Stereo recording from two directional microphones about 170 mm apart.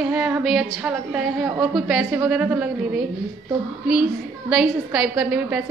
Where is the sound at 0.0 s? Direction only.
10° right (ahead or behind).